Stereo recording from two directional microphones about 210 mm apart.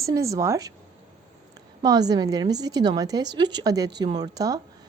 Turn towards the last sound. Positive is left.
turn(degrees=-15)  # may be behind; listen again after turning